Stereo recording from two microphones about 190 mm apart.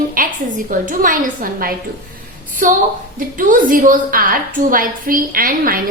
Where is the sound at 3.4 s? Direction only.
45° right (ahead or behind).